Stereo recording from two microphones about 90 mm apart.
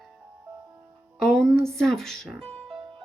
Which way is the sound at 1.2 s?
5° left (ahead or behind).